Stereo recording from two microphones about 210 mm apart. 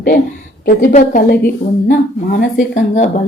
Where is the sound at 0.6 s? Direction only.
40° left (ahead or behind).